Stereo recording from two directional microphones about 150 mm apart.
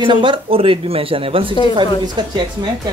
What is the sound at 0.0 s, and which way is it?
Speech, 35° right (ahead or behind).